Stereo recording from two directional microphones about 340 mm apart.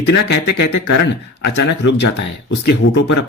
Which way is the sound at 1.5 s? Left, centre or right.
Left.